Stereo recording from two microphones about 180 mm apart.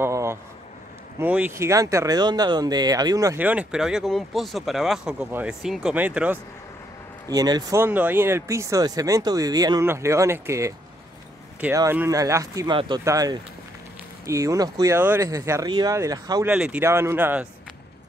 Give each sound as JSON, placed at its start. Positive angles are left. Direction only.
{"t": 0.0, "sound": "a sound", "side_deg": -15}
{"t": 1.2, "sound": "speech", "side_deg": -10}
{"t": 7.2, "sound": "speech", "side_deg": -20}
{"t": 7.8, "sound": "speech", "side_deg": -10}
{"t": 16.4, "sound": "speech", "side_deg": -5}